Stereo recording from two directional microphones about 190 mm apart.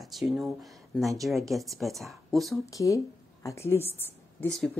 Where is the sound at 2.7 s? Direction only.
15° left (ahead or behind).